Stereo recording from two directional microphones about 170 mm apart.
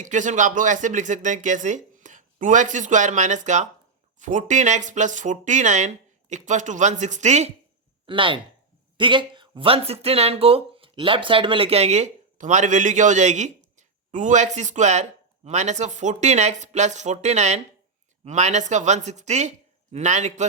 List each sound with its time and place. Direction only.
0.0 s speech: 45° right (ahead or behind)
8.0 s speech: 30° right (ahead or behind)